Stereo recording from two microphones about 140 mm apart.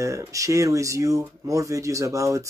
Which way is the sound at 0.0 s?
20° right (ahead or behind).